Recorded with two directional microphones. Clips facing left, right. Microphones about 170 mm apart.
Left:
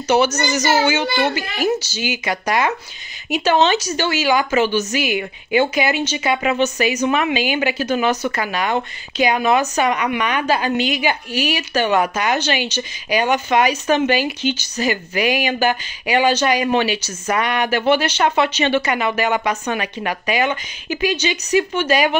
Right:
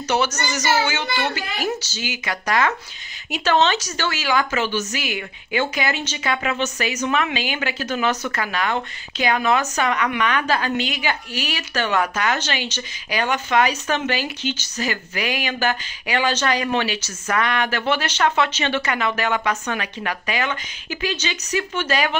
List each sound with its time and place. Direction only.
1.0 s a child's voice: 35° left (ahead or behind)
2.0 s speech: 15° left (ahead or behind)